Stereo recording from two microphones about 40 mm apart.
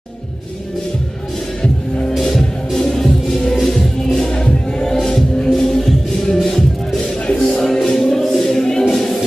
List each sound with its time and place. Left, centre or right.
2.1 s music: centre
4.3 s music: left
8.0 s a sound: centre